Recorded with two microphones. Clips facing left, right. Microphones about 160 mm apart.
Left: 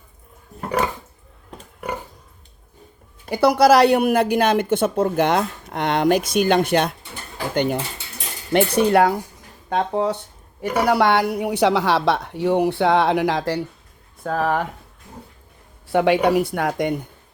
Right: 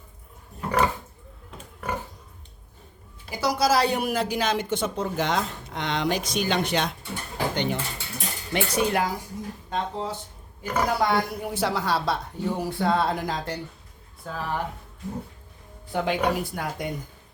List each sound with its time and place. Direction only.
3.2 s a woman's voice: 60° left (ahead or behind)
7.5 s dishes: 50° left (ahead or behind)
8.5 s a woman's voice: 65° left (ahead or behind); by 13.6 s 90° left
14.3 s speech: 80° left
15.9 s speech: 75° left (ahead or behind)